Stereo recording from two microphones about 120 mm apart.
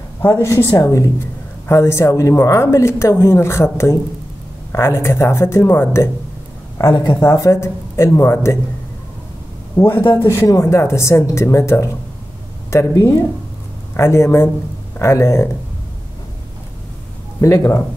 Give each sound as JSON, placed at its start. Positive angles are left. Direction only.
{"t": 0.2, "sound": "speech", "side_deg": 25}
{"t": 6.8, "sound": "speech", "side_deg": 30}
{"t": 9.8, "sound": "speech", "side_deg": 15}
{"t": 17.4, "sound": "speech", "side_deg": 25}